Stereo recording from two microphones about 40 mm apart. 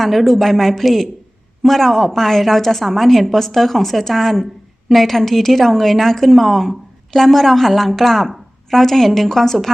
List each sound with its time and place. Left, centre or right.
0.0 s a woman's voice: centre